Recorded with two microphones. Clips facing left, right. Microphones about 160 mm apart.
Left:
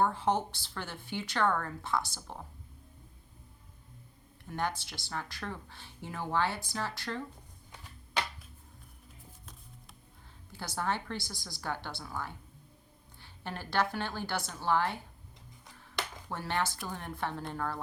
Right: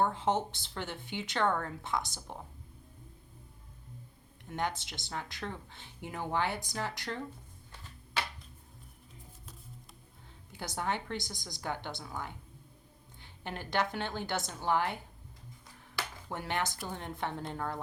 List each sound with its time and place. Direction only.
0.0 s speech: 20° right (ahead or behind)
4.5 s speech: 20° right (ahead or behind)
10.5 s speech: 20° right (ahead or behind)
16.3 s speech: 20° right (ahead or behind)